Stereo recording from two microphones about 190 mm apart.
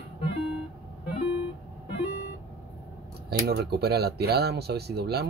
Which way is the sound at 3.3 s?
55° right (ahead or behind).